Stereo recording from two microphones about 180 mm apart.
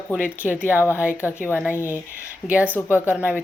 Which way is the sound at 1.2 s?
15° left (ahead or behind).